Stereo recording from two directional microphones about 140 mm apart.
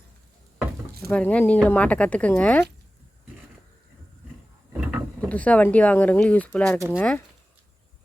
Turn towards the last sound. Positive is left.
turn(degrees=10)  # may be behind; listen again after turning